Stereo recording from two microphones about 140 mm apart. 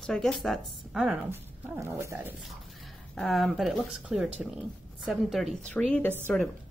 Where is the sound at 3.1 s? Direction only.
Centre (ahead or behind).